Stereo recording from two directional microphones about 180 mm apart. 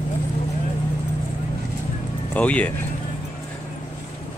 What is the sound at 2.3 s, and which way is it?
Speech, 10° left (ahead or behind).